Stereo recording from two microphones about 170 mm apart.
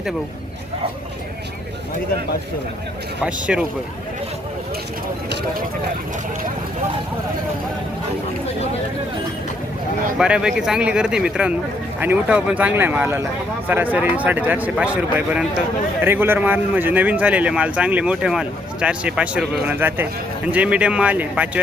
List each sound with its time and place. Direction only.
3.2 s speech: 5° right (ahead or behind)
10.2 s speech: 5° right (ahead or behind)